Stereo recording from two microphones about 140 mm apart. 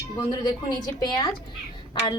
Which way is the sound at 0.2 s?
30° left (ahead or behind).